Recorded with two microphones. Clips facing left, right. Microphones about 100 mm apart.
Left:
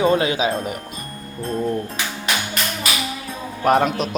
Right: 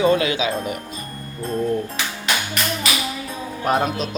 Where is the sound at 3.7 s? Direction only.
65° left (ahead or behind).